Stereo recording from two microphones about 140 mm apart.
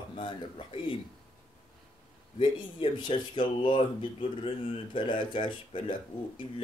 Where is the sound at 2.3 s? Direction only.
40° left (ahead or behind).